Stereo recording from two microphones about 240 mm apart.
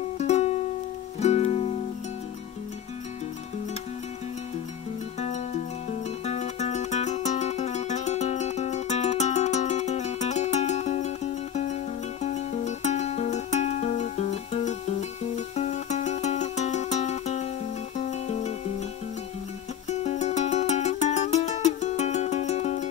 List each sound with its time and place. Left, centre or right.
0.2 s music: left
5.2 s music: left
19.9 s music: left